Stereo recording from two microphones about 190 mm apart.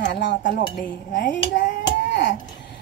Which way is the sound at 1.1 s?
50° left (ahead or behind).